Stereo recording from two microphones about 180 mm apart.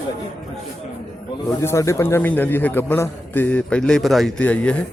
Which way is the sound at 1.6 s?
15° left (ahead or behind).